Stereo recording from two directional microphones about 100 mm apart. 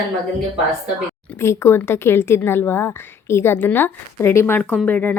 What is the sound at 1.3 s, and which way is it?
Speech, 25° left (ahead or behind).